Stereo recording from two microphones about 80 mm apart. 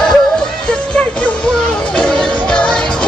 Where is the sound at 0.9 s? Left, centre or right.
Centre.